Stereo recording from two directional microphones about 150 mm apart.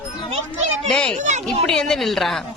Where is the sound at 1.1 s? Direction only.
50° right (ahead or behind).